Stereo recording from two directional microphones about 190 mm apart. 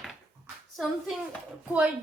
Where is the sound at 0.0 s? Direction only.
Centre (ahead or behind).